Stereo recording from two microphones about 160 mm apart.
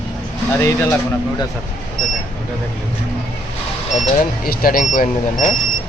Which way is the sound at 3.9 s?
65° left (ahead or behind).